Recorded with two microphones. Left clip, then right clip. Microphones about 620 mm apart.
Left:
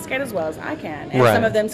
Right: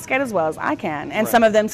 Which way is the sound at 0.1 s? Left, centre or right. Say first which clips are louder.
Right 4 dB; right.